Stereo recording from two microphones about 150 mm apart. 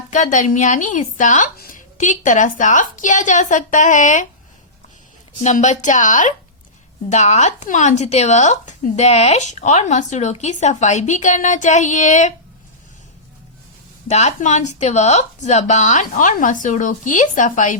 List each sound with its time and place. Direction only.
0.1 s speech: 55° left (ahead or behind)
5.4 s speech: 50° left (ahead or behind)
14.1 s speech: 50° left (ahead or behind)